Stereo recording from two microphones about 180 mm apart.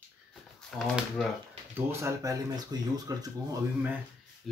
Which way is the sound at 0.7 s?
Centre (ahead or behind).